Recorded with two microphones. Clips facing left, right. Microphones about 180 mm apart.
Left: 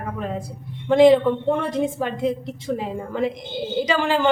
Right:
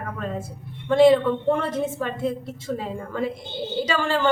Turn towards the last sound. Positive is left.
turn(degrees=15)  # may be behind; listen again after turning